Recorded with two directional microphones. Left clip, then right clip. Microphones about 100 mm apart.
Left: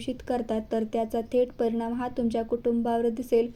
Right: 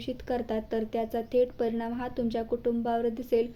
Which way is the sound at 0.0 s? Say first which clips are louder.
Left 2 dB; 40° left (ahead or behind).